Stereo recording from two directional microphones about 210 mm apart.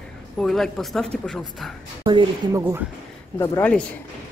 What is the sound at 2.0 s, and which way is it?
Speech, 25° right (ahead or behind).